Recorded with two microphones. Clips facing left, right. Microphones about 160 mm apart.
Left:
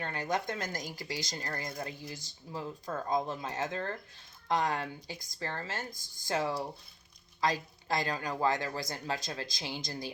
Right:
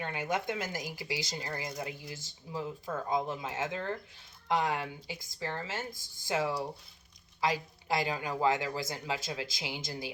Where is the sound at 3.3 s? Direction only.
15° right (ahead or behind).